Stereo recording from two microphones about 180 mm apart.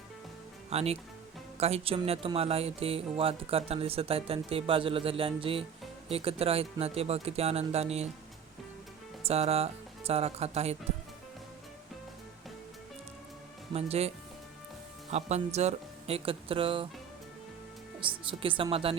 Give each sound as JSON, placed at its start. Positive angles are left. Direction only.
{"t": 0.7, "sound": "speech", "side_deg": -35}
{"t": 9.2, "sound": "speech", "side_deg": -35}
{"t": 13.7, "sound": "speech", "side_deg": -35}
{"t": 15.1, "sound": "speech", "side_deg": -40}
{"t": 18.0, "sound": "a woman's voice", "side_deg": -30}